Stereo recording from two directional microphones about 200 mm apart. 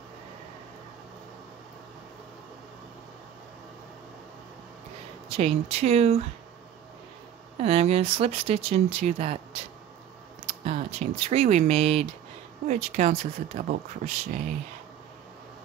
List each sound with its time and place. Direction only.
5.3 s speech: 30° right (ahead or behind)
7.5 s speech: 30° right (ahead or behind)
10.6 s speech: 35° right (ahead or behind)